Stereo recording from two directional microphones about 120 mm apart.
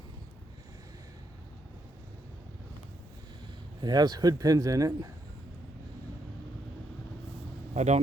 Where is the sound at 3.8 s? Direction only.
35° right (ahead or behind).